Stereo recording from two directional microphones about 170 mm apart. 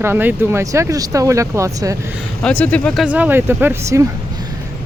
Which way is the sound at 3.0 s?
10° right (ahead or behind).